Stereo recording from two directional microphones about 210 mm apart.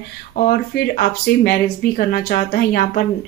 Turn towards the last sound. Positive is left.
turn(degrees=45)  # may be behind; listen again after turning